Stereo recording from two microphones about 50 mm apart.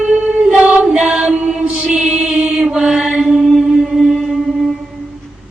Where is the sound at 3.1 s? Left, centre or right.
Centre.